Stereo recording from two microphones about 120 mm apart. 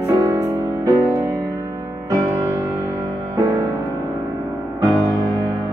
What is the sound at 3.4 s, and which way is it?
Music, 30° right (ahead or behind).